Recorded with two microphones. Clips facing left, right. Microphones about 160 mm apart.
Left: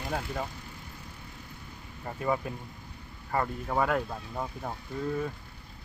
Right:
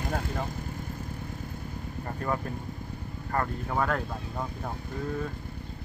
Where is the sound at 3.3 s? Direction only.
10° left (ahead or behind).